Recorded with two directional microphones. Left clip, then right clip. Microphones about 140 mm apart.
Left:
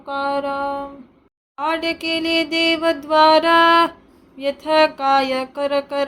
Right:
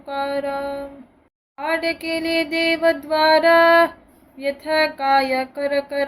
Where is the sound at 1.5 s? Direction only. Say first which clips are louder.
Left 1 dB; 25° left (ahead or behind).